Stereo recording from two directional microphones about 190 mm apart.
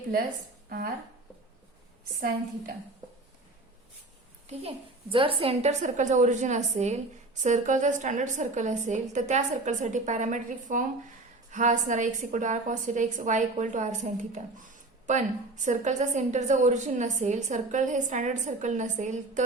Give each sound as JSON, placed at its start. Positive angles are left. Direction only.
{"t": 4.4, "sound": "a woman's voice", "side_deg": -30}